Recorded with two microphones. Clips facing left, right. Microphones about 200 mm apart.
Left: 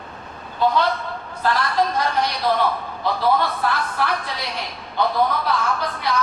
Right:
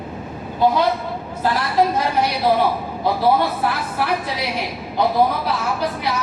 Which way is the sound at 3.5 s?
5° right (ahead or behind).